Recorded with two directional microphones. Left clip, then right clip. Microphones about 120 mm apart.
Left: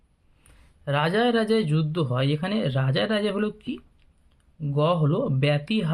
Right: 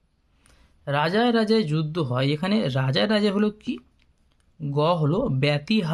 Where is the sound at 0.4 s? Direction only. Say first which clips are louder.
Even; 25° right (ahead or behind).